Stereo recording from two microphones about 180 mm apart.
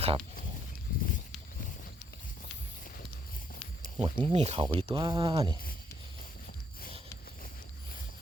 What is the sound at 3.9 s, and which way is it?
Speech, 30° right (ahead or behind).